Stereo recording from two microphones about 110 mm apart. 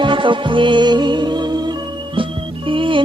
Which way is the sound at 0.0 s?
50° right (ahead or behind).